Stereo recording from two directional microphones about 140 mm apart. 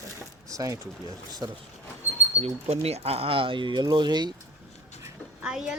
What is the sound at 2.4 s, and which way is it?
Speech, 45° right (ahead or behind).